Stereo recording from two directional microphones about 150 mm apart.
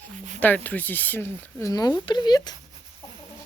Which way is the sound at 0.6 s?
10° left (ahead or behind).